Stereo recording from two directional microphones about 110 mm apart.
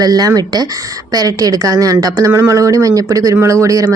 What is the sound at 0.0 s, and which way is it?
Speech, 35° right (ahead or behind).